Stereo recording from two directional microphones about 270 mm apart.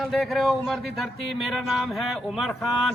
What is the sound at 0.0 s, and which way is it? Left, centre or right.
Speech, centre.